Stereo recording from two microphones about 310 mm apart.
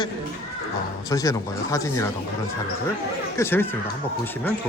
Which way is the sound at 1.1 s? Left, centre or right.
Centre.